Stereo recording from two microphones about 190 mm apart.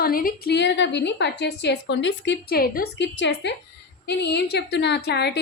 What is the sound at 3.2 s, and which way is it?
A woman's voice, 65° left (ahead or behind).